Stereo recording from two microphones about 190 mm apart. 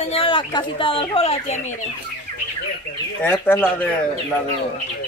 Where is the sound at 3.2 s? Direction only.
10° left (ahead or behind).